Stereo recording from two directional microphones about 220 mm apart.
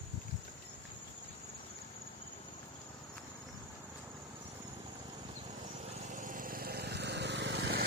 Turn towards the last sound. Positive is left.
turn(degrees=-50)  # may be behind; listen again after turning